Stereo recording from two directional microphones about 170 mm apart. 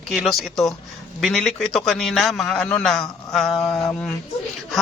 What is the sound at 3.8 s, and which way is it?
Speech, 15° left (ahead or behind).